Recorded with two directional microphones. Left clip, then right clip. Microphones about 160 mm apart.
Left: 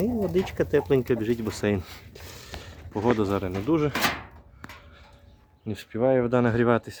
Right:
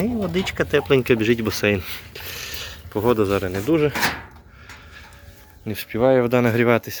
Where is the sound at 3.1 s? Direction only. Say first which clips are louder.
Right 6 dB; centre (ahead or behind).